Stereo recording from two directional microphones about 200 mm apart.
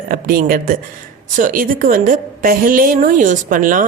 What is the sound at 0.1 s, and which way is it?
A woman's voice, 45° right (ahead or behind).